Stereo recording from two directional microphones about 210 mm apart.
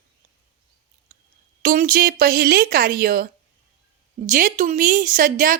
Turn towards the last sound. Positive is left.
turn(degrees=-40)  # may be behind; listen again after turning